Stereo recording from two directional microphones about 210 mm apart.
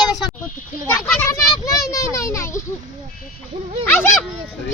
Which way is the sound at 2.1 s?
15° left (ahead or behind).